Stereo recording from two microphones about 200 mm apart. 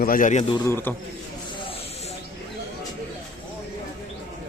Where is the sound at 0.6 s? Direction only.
10° left (ahead or behind).